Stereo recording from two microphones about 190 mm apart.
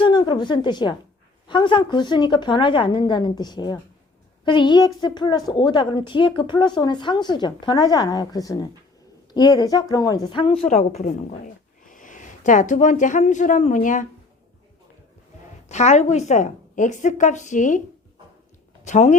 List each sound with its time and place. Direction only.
0.0 s a woman's voice: 25° left (ahead or behind); by 14.1 s 40° left (ahead or behind)
15.7 s speech: 35° left (ahead or behind)
18.9 s speech: 35° left (ahead or behind)